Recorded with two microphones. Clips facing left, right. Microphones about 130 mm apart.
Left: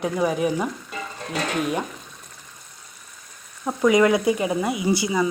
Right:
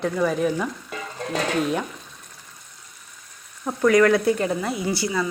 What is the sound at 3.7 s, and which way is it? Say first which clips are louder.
Speech: even; 15° left (ahead or behind).